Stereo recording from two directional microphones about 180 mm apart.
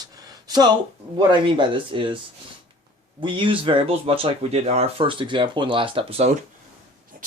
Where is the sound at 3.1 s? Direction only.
25° right (ahead or behind).